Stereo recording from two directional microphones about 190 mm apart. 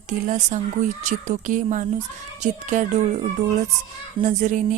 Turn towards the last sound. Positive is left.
turn(degrees=-40)  # may be behind; listen again after turning